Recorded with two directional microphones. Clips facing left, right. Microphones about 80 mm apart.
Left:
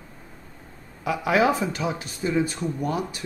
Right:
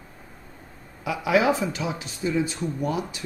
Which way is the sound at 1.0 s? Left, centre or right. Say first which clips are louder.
Even; left.